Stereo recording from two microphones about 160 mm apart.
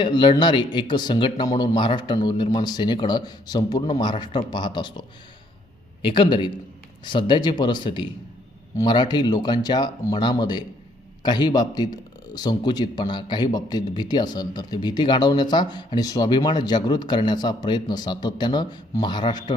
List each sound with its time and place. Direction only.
0.0 s speech: 30° left (ahead or behind)
6.1 s speech: 30° left (ahead or behind)